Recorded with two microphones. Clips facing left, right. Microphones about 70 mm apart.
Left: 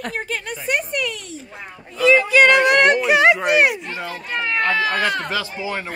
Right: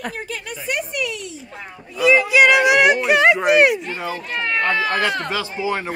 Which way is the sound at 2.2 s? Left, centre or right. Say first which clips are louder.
Even; centre.